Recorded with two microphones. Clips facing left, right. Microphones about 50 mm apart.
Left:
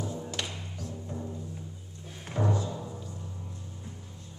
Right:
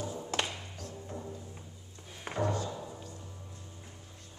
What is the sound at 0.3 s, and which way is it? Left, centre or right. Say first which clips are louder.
Music: right 6 dB; right.